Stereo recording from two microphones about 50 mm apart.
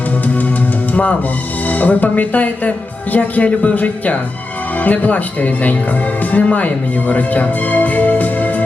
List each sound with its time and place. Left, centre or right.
1.6 s speech: left